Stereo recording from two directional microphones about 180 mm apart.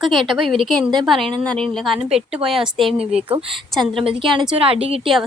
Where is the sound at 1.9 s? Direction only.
35° right (ahead or behind).